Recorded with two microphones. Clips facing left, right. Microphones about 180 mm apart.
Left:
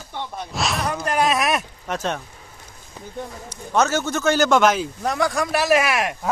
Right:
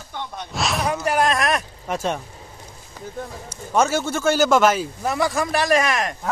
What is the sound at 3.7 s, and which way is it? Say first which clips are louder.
Speech: even; 10° right (ahead or behind).